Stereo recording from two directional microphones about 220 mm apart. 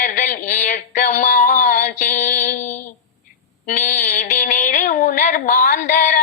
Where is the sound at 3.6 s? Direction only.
35° left (ahead or behind).